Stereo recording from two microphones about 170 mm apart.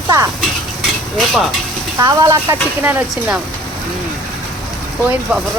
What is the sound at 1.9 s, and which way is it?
Speech, 20° right (ahead or behind).